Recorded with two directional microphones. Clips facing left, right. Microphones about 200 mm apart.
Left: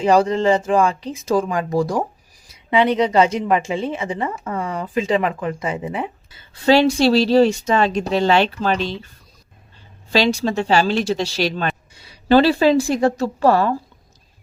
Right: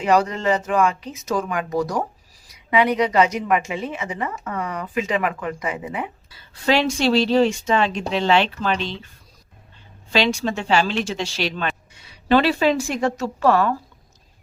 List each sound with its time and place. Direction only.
0.0 s a woman's voice: 30° left (ahead or behind)
10.1 s a woman's voice: 35° left (ahead or behind)